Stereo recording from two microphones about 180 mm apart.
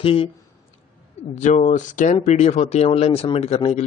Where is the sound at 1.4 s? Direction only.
40° left (ahead or behind).